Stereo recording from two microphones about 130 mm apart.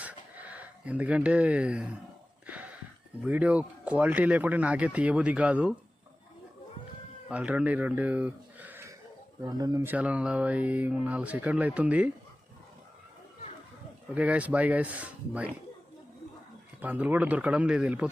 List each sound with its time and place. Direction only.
0.0 s a sound: 10° right (ahead or behind)
3.2 s speech: 10° right (ahead or behind)
7.3 s speech: 10° right (ahead or behind); by 9.8 s 30° right (ahead or behind)
9.8 s speech: 10° right (ahead or behind)
14.1 s speech: 10° right (ahead or behind)
16.8 s speech: 15° right (ahead or behind)